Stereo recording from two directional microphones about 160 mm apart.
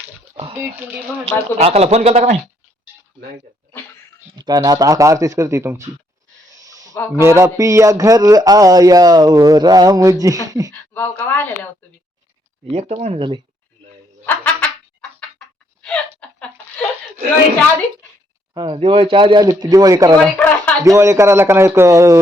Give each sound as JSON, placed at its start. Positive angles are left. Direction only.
{"t": 1.2, "sound": "speech", "side_deg": -40}
{"t": 4.4, "sound": "speech", "side_deg": -25}
{"t": 6.5, "sound": "a sound", "side_deg": -20}
{"t": 7.2, "sound": "speech", "side_deg": -15}
{"t": 10.9, "sound": "a woman's voice", "side_deg": 10}
{"t": 12.7, "sound": "speech", "side_deg": -45}
{"t": 14.3, "sound": "a sound", "side_deg": 10}
{"t": 18.5, "sound": "speech", "side_deg": -30}
{"t": 20.2, "sound": "speech", "side_deg": 10}
{"t": 20.8, "sound": "speech", "side_deg": -20}